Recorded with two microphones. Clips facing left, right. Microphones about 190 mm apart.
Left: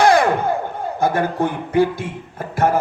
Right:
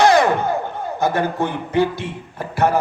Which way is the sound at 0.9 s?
55° left (ahead or behind).